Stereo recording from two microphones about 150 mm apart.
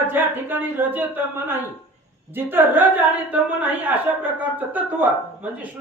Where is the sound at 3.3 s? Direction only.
10° right (ahead or behind).